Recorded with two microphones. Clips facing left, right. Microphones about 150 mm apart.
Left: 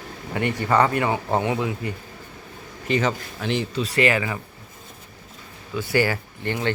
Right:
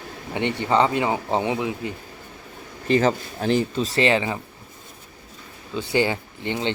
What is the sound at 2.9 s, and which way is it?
Speech, 35° right (ahead or behind).